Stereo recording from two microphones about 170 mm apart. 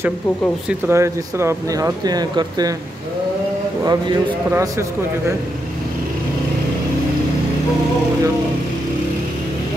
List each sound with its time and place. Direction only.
0.7 s speech: 15° right (ahead or behind)
4.5 s speech: 15° right (ahead or behind)